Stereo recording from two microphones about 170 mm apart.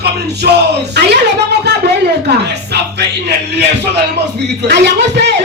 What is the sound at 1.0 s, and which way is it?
Speech, 80° right.